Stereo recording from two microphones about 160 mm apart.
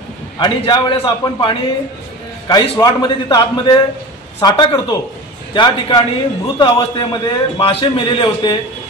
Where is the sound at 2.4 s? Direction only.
25° left (ahead or behind).